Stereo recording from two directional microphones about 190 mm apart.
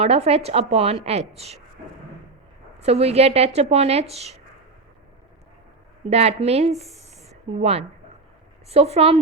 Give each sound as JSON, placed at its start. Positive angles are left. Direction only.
{"t": 0.0, "sound": "a woman's voice", "side_deg": -30}
{"t": 2.8, "sound": "a woman's voice", "side_deg": -35}
{"t": 6.1, "sound": "a woman's voice", "side_deg": -35}